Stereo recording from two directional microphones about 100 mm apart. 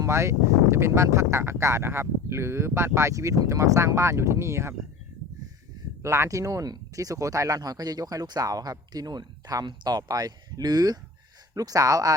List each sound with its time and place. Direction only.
0.0 s speech: 30° right (ahead or behind)
6.0 s speech: 30° right (ahead or behind)